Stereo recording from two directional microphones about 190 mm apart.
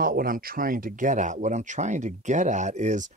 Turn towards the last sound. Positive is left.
turn(degrees=-35)  # may be behind; listen again after turning